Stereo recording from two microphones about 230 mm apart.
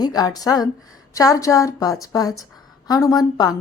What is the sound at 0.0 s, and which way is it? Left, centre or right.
A woman's voice, centre.